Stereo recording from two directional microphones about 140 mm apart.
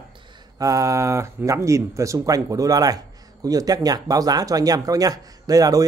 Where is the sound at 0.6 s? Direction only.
25° right (ahead or behind).